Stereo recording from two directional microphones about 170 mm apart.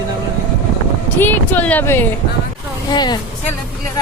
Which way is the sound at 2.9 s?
25° left (ahead or behind).